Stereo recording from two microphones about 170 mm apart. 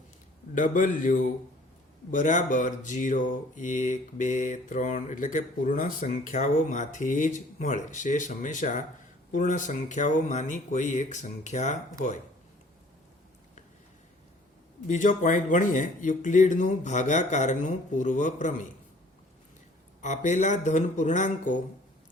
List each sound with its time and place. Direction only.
0.5 s speech: 50° left (ahead or behind)
14.8 s speech: 50° left (ahead or behind)
20.0 s speech: 45° left (ahead or behind)